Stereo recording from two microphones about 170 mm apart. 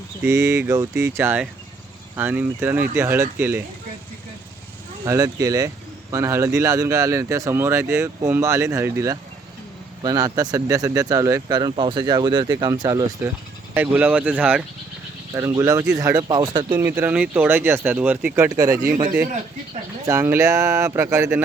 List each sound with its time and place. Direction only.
0.3 s speech: 15° right (ahead or behind)
5.0 s speech: 20° right (ahead or behind)
15.9 s speech: 5° right (ahead or behind)
16.1 s speech: 25° right (ahead or behind)
16.7 s speech: 15° right (ahead or behind)
20.1 s speech: 15° right (ahead or behind)